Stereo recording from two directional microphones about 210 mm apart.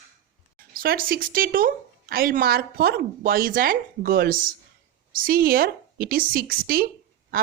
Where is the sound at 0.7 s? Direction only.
45° right (ahead or behind).